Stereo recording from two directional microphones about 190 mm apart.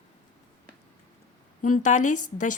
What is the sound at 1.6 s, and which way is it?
Speech, 40° left (ahead or behind).